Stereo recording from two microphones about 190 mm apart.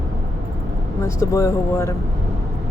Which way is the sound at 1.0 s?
15° left (ahead or behind).